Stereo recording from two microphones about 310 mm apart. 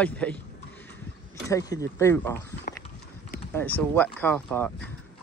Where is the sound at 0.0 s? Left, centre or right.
Centre.